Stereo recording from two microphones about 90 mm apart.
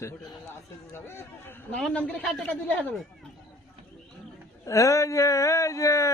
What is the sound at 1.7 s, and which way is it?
Speech, 10° left (ahead or behind).